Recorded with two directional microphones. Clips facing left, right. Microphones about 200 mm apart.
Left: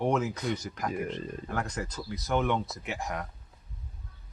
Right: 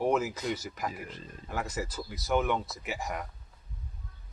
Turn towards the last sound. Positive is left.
turn(degrees=0)  # may be behind; listen again after turning